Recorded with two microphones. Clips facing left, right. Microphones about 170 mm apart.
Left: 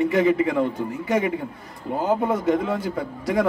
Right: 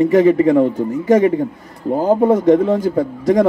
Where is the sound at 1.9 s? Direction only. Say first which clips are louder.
Right 8 dB; 35° right (ahead or behind).